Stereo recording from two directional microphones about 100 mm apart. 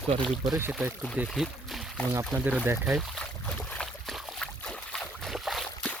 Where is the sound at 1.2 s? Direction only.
Centre (ahead or behind).